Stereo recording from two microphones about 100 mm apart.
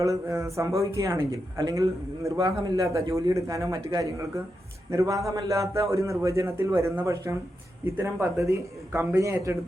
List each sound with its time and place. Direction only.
0.0 s a man's voice: 30° right (ahead or behind)